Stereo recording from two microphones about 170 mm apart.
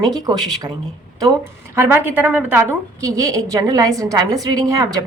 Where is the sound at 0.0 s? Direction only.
25° right (ahead or behind).